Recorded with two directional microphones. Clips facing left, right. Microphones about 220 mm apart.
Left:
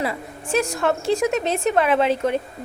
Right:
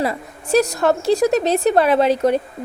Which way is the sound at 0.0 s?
40° right (ahead or behind).